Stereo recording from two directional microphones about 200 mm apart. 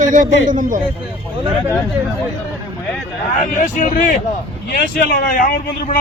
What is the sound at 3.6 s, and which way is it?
Speech, 40° left (ahead or behind).